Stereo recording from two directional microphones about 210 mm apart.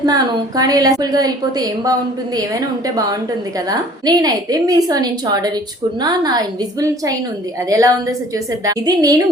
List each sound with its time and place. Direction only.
0.0 s a woman's voice: 20° right (ahead or behind)